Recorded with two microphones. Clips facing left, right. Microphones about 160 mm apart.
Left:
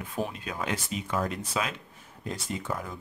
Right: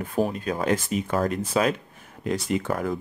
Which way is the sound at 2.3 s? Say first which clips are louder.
Right 8 dB; 75° right (ahead or behind).